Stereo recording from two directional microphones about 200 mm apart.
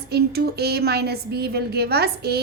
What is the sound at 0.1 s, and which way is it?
A woman's voice, 50° right (ahead or behind).